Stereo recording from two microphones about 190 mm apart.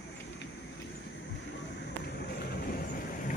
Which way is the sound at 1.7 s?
65° left (ahead or behind).